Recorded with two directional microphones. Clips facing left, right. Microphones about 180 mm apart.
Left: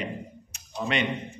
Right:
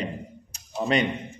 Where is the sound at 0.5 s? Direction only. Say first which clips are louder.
Right 5 dB; 40° right (ahead or behind).